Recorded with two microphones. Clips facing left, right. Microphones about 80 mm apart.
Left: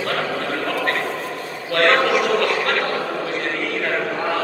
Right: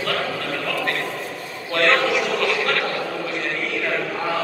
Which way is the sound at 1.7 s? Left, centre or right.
Left.